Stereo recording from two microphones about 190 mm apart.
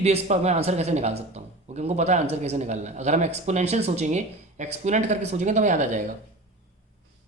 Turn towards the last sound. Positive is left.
turn(degrees=-40)  # may be behind; listen again after turning